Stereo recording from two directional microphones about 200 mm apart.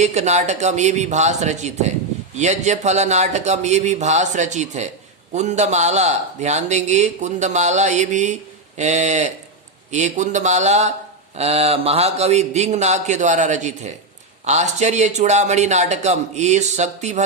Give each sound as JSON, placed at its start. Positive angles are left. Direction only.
{"t": 0.0, "sound": "a man's voice", "side_deg": -35}